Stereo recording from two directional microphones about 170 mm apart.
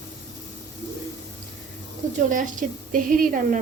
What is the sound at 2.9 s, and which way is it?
Speech, 50° right (ahead or behind).